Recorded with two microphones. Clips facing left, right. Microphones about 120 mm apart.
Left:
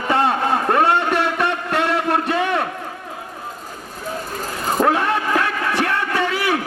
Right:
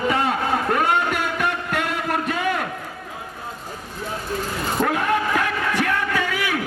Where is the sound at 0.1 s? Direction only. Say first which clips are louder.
Left 8 dB; 30° left (ahead or behind).